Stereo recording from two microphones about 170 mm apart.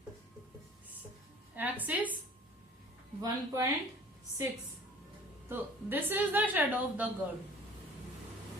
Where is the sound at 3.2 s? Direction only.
20° right (ahead or behind).